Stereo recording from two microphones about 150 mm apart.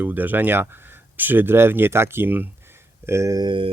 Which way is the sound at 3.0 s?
20° right (ahead or behind).